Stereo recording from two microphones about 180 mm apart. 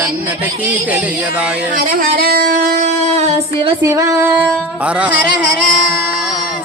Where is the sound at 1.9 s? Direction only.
55° right (ahead or behind).